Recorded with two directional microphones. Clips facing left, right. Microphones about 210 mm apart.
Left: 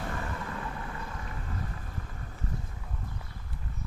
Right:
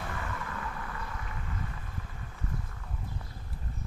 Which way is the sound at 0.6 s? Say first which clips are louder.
Left 1 dB; 25° left (ahead or behind).